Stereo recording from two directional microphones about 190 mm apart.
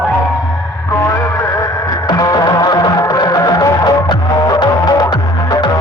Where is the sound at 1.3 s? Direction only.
15° left (ahead or behind).